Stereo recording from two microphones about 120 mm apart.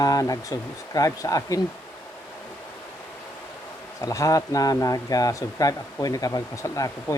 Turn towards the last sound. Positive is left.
turn(degrees=25)  # may be behind; listen again after turning